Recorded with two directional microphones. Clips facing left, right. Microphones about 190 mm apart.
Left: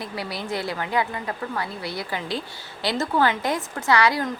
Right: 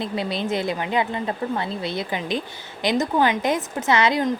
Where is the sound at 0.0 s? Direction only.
20° right (ahead or behind).